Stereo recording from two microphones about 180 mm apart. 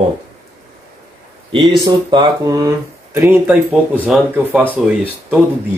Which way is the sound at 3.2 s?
10° right (ahead or behind).